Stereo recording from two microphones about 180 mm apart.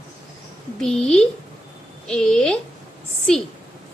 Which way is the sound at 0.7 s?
5° left (ahead or behind).